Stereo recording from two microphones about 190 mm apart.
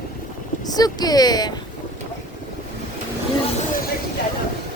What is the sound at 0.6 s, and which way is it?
Speech, 20° left (ahead or behind).